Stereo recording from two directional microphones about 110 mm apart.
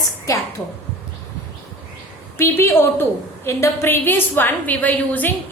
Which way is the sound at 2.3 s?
25° left (ahead or behind).